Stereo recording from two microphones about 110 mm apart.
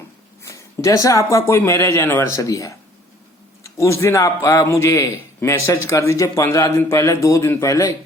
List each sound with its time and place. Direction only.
0.4 s a man's voice: 25° left (ahead or behind)